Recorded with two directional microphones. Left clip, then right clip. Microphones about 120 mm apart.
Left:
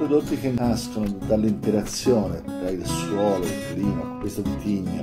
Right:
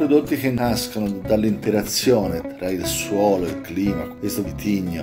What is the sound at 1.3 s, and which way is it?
Speech, 15° left (ahead or behind).